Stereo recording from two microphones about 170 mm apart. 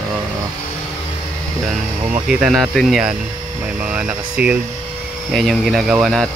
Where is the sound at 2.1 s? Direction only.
5° right (ahead or behind).